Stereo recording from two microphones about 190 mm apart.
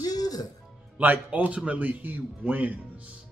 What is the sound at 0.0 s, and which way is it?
Music, 20° left (ahead or behind).